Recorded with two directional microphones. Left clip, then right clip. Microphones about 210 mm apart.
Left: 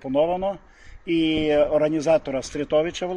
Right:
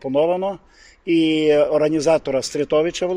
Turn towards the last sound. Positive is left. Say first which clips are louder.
# right 4 dB
turn(degrees=-50)  # may be behind; listen again after turning